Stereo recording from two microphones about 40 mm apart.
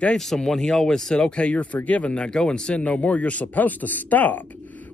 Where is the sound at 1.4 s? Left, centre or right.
Left.